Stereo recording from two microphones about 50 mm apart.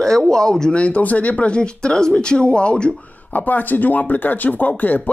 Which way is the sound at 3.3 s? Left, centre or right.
Left.